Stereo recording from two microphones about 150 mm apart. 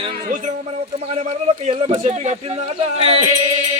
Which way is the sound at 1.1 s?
45° right (ahead or behind).